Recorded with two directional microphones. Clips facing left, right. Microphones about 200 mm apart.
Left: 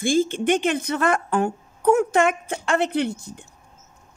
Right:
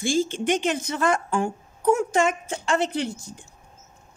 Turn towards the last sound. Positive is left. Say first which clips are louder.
# left 4 dB
turn(degrees=60)  # may be behind; listen again after turning